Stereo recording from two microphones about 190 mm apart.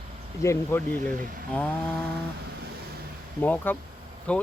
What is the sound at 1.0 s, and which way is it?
Speech, 45° right (ahead or behind).